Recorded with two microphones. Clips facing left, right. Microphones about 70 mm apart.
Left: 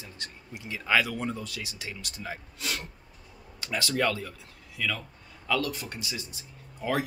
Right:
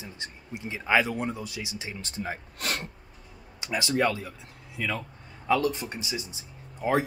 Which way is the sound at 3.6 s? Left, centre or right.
Centre.